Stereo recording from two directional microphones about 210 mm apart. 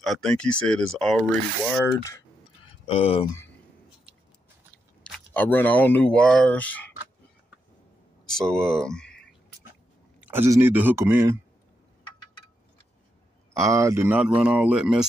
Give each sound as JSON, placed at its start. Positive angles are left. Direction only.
{"t": 0.0, "sound": "speech", "side_deg": 0}
{"t": 2.9, "sound": "speech", "side_deg": 30}
{"t": 5.1, "sound": "speech", "side_deg": 10}
{"t": 8.4, "sound": "speech", "side_deg": 5}
{"t": 10.2, "sound": "speech", "side_deg": -10}
{"t": 13.5, "sound": "speech", "side_deg": -15}